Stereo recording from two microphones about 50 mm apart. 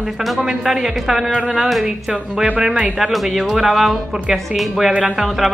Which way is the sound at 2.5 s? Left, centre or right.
Centre.